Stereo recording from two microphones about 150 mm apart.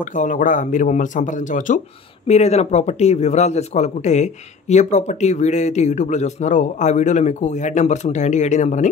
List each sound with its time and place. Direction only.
0.0 s a man's voice: 60° left (ahead or behind)
2.2 s speech: 45° left (ahead or behind)